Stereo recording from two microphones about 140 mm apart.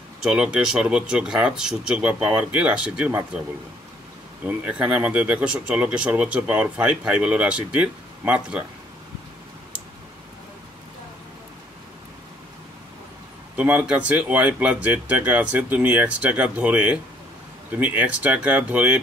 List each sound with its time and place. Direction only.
0.2 s speech: 10° right (ahead or behind)
4.5 s speech: 10° right (ahead or behind)
13.6 s speech: 10° right (ahead or behind)